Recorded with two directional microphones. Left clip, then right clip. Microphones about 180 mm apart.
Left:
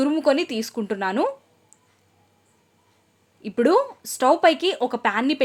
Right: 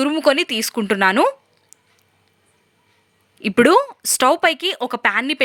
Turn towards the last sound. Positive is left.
turn(degrees=-20)  # may be behind; listen again after turning